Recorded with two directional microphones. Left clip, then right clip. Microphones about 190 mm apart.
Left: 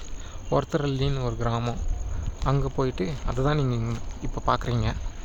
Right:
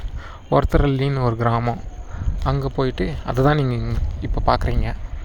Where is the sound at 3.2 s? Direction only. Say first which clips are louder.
Right 9 dB; 25° right (ahead or behind); by 4.9 s 10° right (ahead or behind).